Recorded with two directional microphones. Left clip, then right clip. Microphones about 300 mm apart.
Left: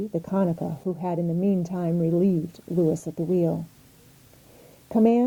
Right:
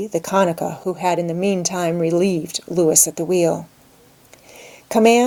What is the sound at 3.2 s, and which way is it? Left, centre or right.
Speech, right.